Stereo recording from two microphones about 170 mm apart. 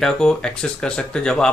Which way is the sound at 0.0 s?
5° left (ahead or behind).